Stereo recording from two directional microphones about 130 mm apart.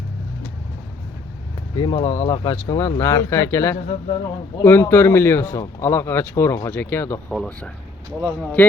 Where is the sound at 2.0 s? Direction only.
25° left (ahead or behind).